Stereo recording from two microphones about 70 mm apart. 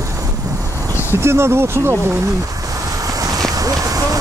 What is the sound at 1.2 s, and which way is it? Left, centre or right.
Speech, right.